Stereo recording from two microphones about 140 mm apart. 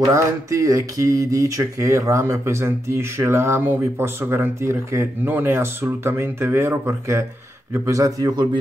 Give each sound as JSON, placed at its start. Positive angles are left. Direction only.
{"t": 0.0, "sound": "speech", "side_deg": -25}